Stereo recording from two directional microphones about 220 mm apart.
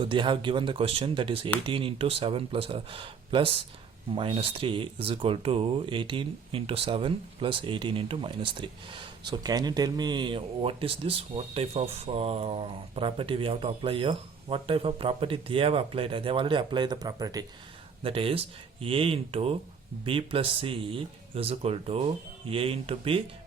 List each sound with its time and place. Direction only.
0.0 s speech: 20° right (ahead or behind)